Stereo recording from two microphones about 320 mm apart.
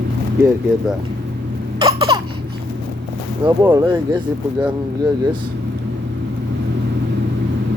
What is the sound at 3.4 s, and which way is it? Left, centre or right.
Speech, centre.